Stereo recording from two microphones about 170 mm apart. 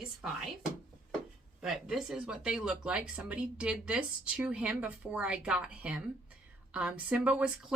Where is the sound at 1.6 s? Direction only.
5° right (ahead or behind).